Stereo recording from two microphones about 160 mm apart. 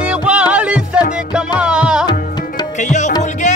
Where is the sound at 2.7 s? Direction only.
50° left (ahead or behind).